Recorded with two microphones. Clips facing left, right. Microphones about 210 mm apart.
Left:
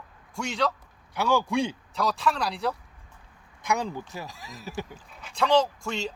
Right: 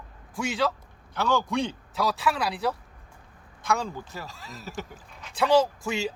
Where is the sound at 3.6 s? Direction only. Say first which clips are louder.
Even; 15° left (ahead or behind).